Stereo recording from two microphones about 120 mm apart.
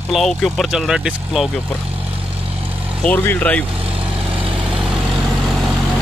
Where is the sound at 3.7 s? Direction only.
50° right (ahead or behind).